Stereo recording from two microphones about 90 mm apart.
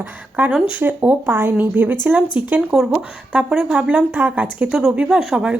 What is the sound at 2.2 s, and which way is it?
Speech, 65° left (ahead or behind).